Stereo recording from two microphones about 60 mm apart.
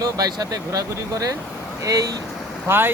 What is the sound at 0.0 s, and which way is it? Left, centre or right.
Speech, right.